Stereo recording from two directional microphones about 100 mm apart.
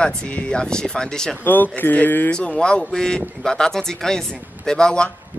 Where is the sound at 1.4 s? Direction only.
20° left (ahead or behind).